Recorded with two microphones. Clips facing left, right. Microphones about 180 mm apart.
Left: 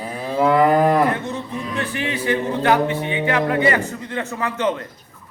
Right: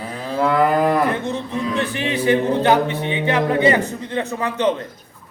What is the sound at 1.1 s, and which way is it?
A man's voice, 20° right (ahead or behind).